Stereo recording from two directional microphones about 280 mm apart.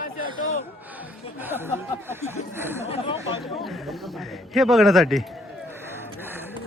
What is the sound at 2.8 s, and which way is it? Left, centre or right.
Chatter, centre.